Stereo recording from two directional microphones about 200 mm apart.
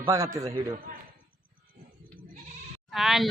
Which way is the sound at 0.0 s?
15° right (ahead or behind).